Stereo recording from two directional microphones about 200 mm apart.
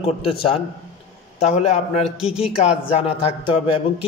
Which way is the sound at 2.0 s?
5° right (ahead or behind).